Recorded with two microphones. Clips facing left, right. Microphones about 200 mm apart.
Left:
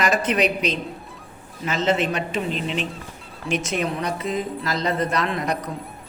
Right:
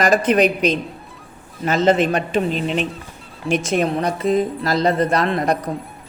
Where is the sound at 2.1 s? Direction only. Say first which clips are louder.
Right 6 dB; 45° right (ahead or behind).